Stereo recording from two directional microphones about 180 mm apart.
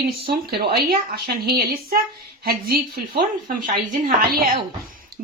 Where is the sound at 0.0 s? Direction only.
55° right (ahead or behind).